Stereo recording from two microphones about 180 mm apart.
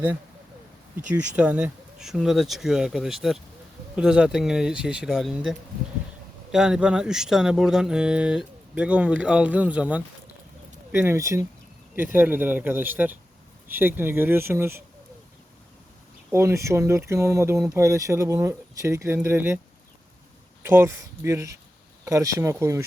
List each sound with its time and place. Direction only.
1.1 s speech: 5° right (ahead or behind)
16.3 s speech: 15° right (ahead or behind)
20.6 s speech: 10° right (ahead or behind)